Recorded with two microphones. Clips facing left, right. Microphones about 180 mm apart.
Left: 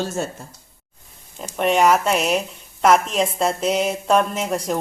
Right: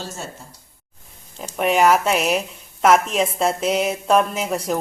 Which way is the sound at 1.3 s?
Centre (ahead or behind).